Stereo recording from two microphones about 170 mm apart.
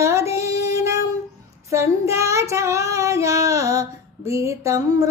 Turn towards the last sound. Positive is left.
turn(degrees=-20)  # may be behind; listen again after turning